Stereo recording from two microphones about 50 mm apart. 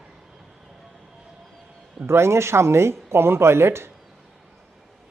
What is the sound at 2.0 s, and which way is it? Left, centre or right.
Speech, right.